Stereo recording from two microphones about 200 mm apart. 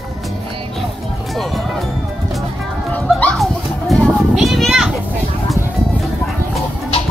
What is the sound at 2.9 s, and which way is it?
Children playing, 5° left (ahead or behind).